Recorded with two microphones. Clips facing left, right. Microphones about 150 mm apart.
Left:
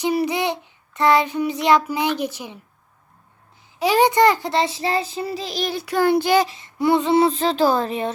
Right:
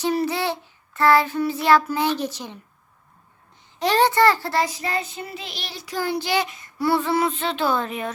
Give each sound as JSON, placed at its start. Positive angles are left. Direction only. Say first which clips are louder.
{"t": 0.0, "sound": "child singing", "louder": "left 2 dB", "side_deg": 15}
{"t": 3.8, "sound": "a child's voice", "louder": "left 2 dB", "side_deg": 10}
{"t": 6.5, "sound": "a child's voice", "louder": "left 3 dB", "side_deg": 25}